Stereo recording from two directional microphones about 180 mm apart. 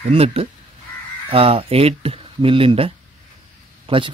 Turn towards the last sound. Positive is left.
turn(degrees=-30)  # may be behind; listen again after turning